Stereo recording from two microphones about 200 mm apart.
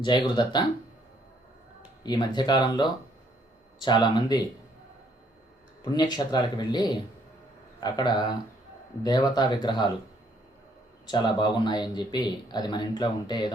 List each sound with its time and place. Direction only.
0.0 s speech: 20° left (ahead or behind)
2.0 s speech: 20° left (ahead or behind)
5.8 s speech: 20° left (ahead or behind)
11.0 s speech: 20° left (ahead or behind)